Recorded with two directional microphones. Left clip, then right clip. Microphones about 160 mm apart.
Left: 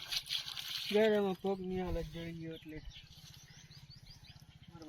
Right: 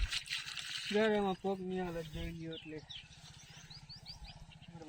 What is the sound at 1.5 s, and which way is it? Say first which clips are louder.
Speech: left 1 dB; 15° left (ahead or behind).